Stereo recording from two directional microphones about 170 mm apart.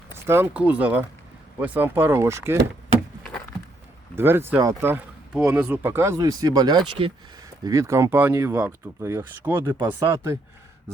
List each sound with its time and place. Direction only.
0.1 s speech: 15° right (ahead or behind)
4.1 s speech: 15° right (ahead or behind)